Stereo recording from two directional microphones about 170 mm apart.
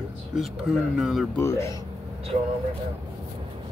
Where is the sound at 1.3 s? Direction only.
15° left (ahead or behind).